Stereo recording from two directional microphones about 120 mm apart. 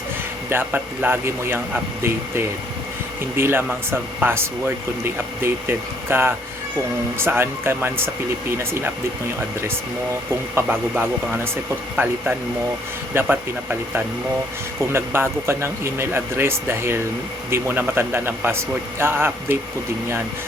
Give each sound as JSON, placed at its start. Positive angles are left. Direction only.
{"t": 0.5, "sound": "speech", "side_deg": -15}
{"t": 3.3, "sound": "a man's voice", "side_deg": -20}
{"t": 10.5, "sound": "a man's voice", "side_deg": -15}